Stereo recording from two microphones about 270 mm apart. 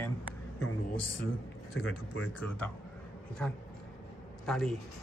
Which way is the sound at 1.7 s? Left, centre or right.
Left.